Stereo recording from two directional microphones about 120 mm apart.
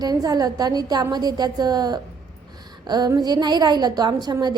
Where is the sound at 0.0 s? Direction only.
30° right (ahead or behind).